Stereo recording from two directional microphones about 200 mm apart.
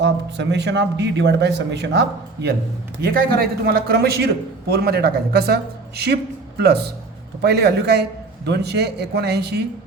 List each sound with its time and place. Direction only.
0.0 s a man's voice: 60° right (ahead or behind)
6.6 s a man's voice: 55° right (ahead or behind)